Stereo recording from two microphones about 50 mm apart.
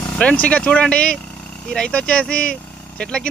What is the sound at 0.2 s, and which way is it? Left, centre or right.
Speech, left.